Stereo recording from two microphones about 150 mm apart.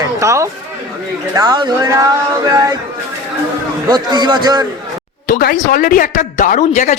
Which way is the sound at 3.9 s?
30° right (ahead or behind).